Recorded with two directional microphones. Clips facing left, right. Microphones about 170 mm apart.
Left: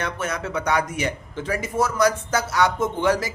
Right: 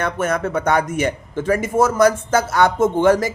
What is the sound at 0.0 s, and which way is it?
Speech, 50° right (ahead or behind).